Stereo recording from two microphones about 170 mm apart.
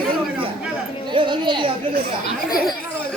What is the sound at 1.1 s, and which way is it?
Speech, 30° right (ahead or behind).